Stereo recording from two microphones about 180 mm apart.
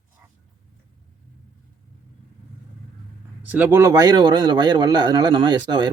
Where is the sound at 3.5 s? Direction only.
10° right (ahead or behind).